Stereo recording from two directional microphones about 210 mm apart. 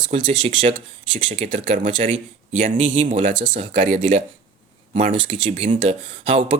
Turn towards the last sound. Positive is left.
turn(degrees=-25)  # may be behind; listen again after turning